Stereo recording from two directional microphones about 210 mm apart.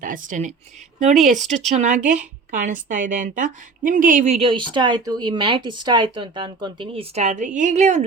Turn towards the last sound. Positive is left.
turn(degrees=-35)  # may be behind; listen again after turning